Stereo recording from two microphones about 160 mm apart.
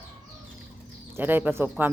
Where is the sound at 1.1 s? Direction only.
10° right (ahead or behind).